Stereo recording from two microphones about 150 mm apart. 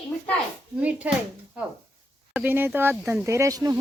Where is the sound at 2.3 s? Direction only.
15° right (ahead or behind).